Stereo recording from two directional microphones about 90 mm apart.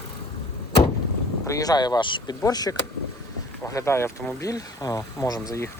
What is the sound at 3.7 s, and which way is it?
Speech, 30° left (ahead or behind).